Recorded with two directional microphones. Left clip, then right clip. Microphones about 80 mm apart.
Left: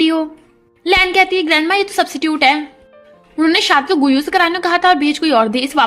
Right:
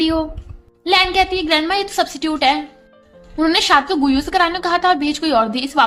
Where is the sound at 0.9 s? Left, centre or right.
Left.